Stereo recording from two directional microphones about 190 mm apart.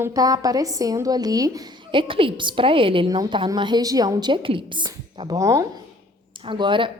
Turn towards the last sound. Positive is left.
turn(degrees=-25)  # may be behind; listen again after turning